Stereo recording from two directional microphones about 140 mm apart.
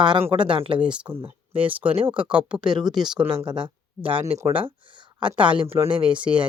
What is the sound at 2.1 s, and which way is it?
Speech, 35° right (ahead or behind).